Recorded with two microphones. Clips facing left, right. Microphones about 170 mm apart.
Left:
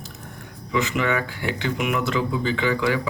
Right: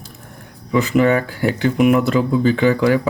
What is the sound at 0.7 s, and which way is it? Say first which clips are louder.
Speech: right 8 dB; 40° right (ahead or behind).